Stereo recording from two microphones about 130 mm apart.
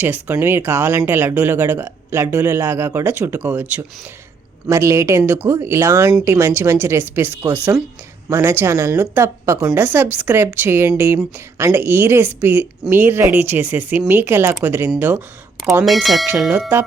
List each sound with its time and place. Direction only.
0.0 s speech: 15° right (ahead or behind)
15.8 s speech: centre (ahead or behind)
16.5 s speech: 15° right (ahead or behind)